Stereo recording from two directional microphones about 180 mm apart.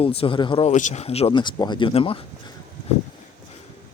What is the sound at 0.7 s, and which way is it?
Speech, 40° left (ahead or behind).